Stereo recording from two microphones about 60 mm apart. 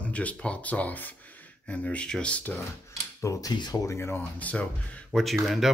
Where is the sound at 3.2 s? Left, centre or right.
Left.